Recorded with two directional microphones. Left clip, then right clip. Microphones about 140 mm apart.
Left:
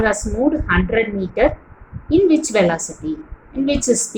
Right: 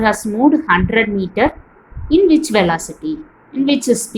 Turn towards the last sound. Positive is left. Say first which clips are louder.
# right 2 dB
turn(degrees=-30)  # may be behind; listen again after turning